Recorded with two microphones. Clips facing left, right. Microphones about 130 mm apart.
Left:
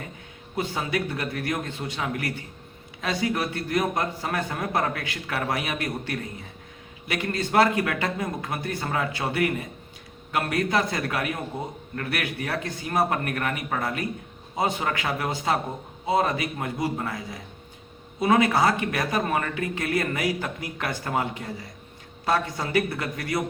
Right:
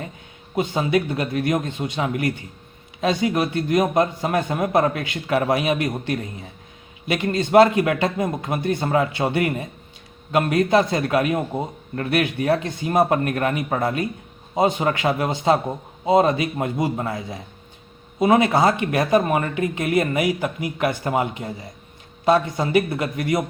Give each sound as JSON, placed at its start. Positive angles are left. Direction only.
{"t": 0.5, "sound": "speech", "side_deg": -20}